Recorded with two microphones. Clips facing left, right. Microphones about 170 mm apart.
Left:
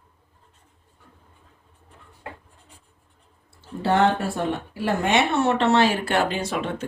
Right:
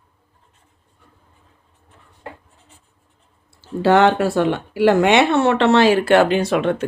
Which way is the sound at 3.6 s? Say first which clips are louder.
Right 6 dB; 90° right.